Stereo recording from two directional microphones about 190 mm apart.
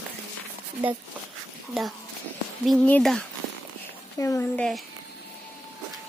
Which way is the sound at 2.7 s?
5° left (ahead or behind).